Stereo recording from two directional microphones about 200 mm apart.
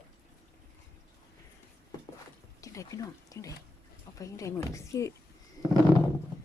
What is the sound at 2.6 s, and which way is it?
Speech, 15° left (ahead or behind).